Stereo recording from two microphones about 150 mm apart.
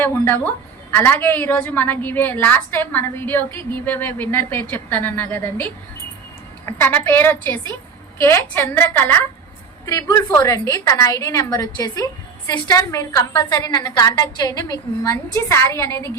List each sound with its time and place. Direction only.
0.0 s a woman's voice: 15° left (ahead or behind)